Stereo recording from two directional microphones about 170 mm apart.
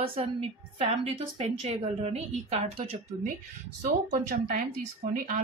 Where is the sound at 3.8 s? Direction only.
50° right (ahead or behind).